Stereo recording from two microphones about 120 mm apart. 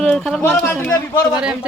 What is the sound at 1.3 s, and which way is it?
Speech, 5° right (ahead or behind).